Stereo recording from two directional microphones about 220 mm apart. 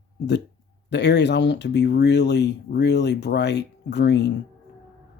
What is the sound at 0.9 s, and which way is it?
Speech, 50° left (ahead or behind).